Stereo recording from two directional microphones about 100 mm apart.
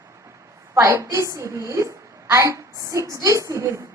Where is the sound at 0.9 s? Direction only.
30° right (ahead or behind).